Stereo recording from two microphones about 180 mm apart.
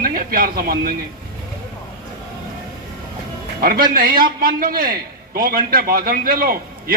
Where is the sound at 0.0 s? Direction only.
55° right (ahead or behind).